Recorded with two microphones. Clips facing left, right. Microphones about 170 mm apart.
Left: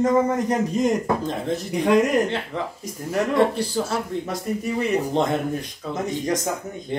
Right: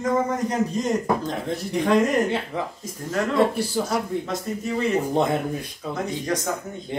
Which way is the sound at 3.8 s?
10° right (ahead or behind).